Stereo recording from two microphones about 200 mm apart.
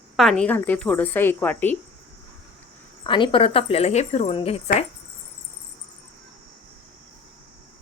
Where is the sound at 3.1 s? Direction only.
25° left (ahead or behind).